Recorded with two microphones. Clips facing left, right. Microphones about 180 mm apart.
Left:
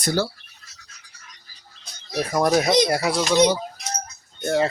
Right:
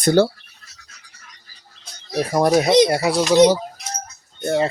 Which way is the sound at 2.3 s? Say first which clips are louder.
Right 3 dB; 30° right (ahead or behind).